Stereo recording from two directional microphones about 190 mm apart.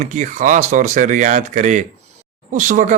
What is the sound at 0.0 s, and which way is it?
Speech, 40° right (ahead or behind).